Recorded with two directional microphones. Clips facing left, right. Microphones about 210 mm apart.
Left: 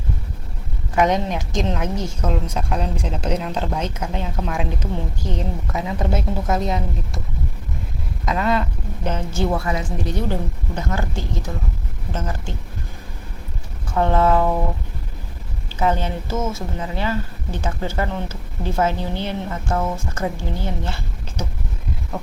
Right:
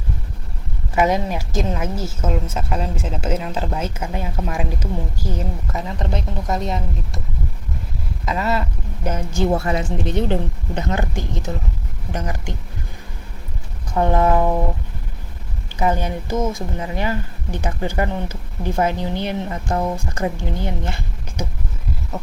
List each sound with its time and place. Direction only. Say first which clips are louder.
0.9 s a woman's voice: even; 5° right (ahead or behind)
8.2 s a sound: left 1 dB; centre (ahead or behind)
9.0 s a woman's voice: right 1 dB; 10° right (ahead or behind)
9.5 s a woman's voice: right 3 dB; 30° right (ahead or behind)
13.9 s a woman's voice: even; 15° right (ahead or behind)
15.8 s a woman's voice: even; 10° right (ahead or behind)
22.1 s a sound: left 1 dB; 5° right (ahead or behind)